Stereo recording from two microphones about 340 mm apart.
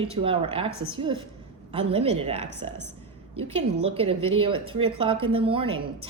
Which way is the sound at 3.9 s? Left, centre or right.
Centre.